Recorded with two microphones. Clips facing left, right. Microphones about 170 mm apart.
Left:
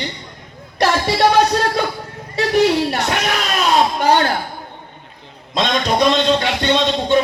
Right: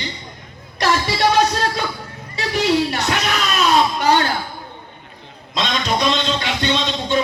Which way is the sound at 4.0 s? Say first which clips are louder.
Left 2 dB; 50° left (ahead or behind).